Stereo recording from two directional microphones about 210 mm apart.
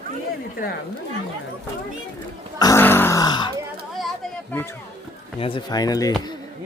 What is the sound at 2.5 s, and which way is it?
Grunt, 15° left (ahead or behind).